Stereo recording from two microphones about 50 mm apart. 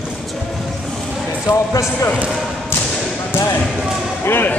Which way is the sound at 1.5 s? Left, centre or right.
Left.